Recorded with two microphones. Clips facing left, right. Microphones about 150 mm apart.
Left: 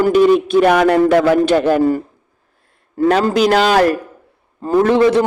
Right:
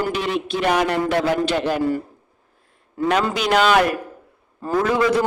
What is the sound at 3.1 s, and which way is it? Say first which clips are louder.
Speech: left 5 dB; 40° left (ahead or behind).